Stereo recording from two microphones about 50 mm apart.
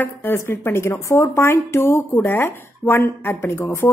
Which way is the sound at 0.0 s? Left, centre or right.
Left.